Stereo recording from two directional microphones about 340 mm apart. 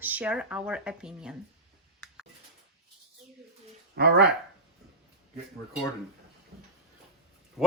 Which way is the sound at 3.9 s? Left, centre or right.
Right.